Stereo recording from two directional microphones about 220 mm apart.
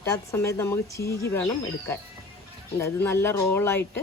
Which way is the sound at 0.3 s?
10° left (ahead or behind).